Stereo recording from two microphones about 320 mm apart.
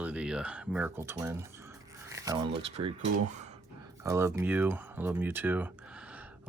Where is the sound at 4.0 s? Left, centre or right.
Centre.